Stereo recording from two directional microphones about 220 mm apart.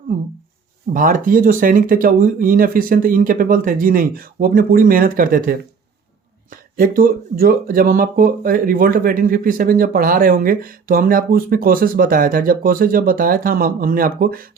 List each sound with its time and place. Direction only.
0.9 s speech: 35° right (ahead or behind)